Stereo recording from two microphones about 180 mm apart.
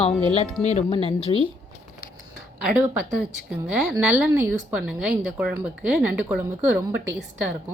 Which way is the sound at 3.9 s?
10° right (ahead or behind).